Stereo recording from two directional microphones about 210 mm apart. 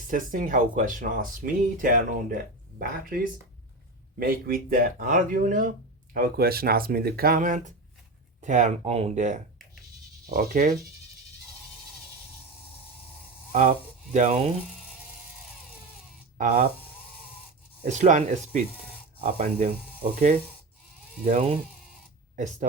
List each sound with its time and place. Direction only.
0.1 s speech: 40° right (ahead or behind)
4.2 s speech: 45° right (ahead or behind)
13.5 s speech: 35° right (ahead or behind)
16.4 s speech: 40° right (ahead or behind)
17.8 s speech: 35° right (ahead or behind)
21.2 s speech: 30° right (ahead or behind)